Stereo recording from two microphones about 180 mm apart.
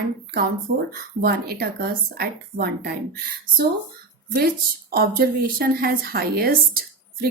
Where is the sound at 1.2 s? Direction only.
60° right (ahead or behind).